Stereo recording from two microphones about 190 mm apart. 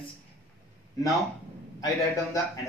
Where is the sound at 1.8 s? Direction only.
15° left (ahead or behind).